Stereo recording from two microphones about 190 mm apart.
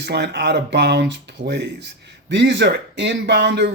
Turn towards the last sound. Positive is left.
turn(degrees=-65)  # may be behind; listen again after turning